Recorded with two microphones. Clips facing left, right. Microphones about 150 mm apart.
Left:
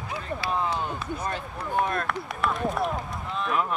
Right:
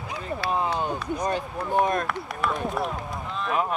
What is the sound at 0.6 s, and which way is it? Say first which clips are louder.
Speech: right 2 dB; 20° right (ahead or behind).